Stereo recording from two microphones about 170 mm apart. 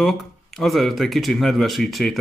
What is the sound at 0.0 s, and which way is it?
Speech, centre (ahead or behind).